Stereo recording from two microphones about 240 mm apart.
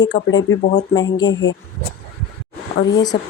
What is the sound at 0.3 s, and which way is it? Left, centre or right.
Speech, left.